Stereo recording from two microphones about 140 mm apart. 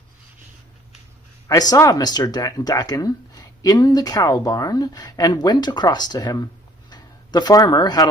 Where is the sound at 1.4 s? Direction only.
25° left (ahead or behind).